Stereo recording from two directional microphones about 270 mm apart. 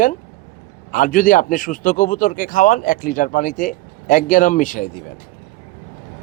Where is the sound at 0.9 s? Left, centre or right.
Left.